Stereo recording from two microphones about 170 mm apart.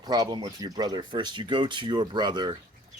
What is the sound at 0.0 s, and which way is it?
Speech, 25° right (ahead or behind).